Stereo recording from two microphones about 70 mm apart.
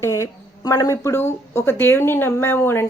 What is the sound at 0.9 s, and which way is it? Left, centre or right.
Speech, left.